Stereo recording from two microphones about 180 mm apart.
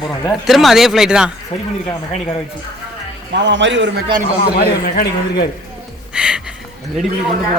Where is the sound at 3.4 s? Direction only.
85° right.